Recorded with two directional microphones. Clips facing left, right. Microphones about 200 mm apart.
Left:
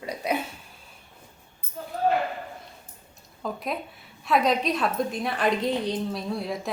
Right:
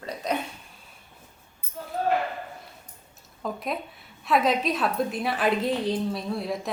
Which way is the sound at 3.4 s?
Centre (ahead or behind).